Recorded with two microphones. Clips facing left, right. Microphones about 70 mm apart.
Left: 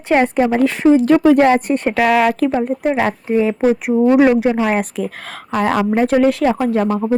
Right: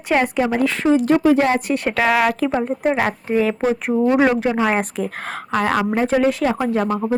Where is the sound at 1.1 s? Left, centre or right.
Left.